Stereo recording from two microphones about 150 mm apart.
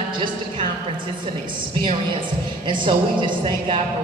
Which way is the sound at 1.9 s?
35° right (ahead or behind).